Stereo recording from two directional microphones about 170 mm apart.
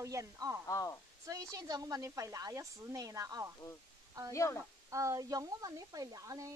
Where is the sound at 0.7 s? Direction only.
20° left (ahead or behind).